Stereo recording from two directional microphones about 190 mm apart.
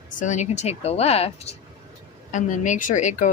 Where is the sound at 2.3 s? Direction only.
40° left (ahead or behind).